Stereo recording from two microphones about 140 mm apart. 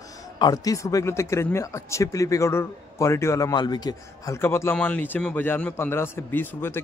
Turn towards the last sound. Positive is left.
turn(degrees=15)  # may be behind; listen again after turning